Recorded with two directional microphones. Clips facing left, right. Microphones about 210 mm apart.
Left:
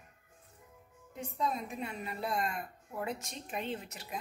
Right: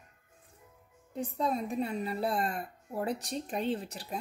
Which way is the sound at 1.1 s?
35° right (ahead or behind).